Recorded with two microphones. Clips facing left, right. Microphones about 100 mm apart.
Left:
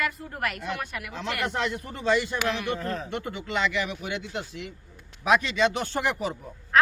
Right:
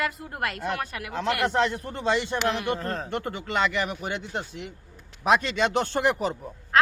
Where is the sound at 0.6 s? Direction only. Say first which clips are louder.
Right 3 dB; 45° right (ahead or behind).